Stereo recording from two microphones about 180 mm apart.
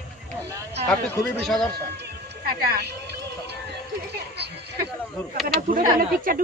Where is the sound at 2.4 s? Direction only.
55° right (ahead or behind).